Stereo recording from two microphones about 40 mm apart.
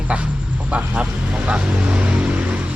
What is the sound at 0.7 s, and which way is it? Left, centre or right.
Speech, right.